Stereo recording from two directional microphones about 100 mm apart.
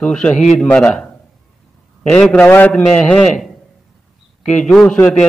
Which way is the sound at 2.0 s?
5° left (ahead or behind).